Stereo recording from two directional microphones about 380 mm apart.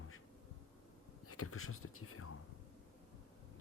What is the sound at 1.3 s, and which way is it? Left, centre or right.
Speech, left.